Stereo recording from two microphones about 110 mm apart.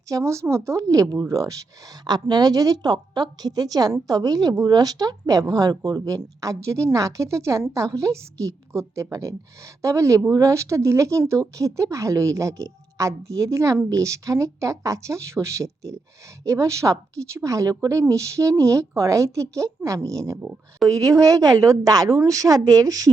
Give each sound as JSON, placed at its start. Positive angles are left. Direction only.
{"t": 0.1, "sound": "a woman's voice", "side_deg": -25}
{"t": 20.4, "sound": "speech", "side_deg": -10}
{"t": 20.8, "sound": "a woman's voice", "side_deg": -30}